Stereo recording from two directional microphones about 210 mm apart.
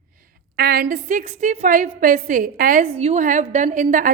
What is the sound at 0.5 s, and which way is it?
A woman's voice, 45° right (ahead or behind).